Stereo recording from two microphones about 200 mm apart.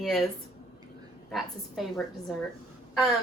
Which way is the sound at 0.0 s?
Centre (ahead or behind).